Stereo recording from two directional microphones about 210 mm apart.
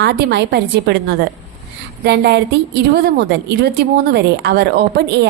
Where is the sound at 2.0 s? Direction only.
50° right (ahead or behind).